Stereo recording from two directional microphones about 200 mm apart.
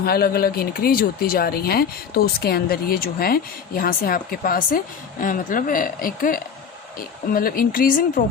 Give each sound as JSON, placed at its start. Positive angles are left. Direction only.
{"t": 0.0, "sound": "speech", "side_deg": 50}